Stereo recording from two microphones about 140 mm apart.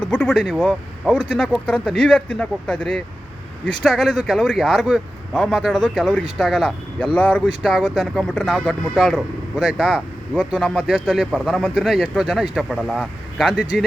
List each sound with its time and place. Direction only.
0.0 s speech: 10° left (ahead or behind)
7.6 s speech: centre (ahead or behind)